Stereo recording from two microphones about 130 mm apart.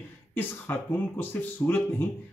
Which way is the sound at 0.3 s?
15° left (ahead or behind).